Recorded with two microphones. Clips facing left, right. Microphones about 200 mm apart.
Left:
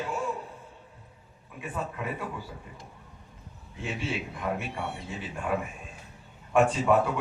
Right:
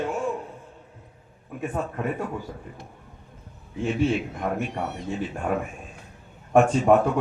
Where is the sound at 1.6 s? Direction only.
40° right (ahead or behind).